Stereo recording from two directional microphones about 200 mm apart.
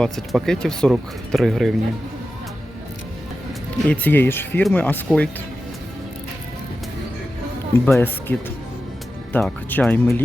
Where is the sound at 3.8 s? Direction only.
10° left (ahead or behind).